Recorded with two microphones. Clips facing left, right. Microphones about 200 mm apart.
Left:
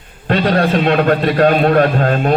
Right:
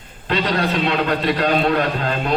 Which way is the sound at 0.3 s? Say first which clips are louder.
Left 6 dB; 50° left (ahead or behind).